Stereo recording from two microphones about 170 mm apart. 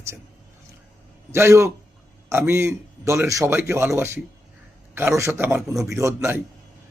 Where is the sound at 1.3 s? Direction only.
15° right (ahead or behind).